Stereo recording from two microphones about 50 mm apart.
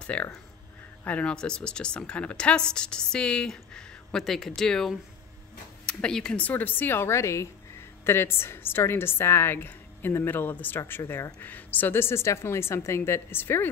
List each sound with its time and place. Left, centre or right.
0.0 s speech: left
6.3 s a woman's voice: left
10.9 s a woman's voice: left
11.3 s speech: left